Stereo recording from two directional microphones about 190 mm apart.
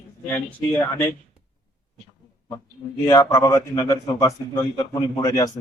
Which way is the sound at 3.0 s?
15° left (ahead or behind).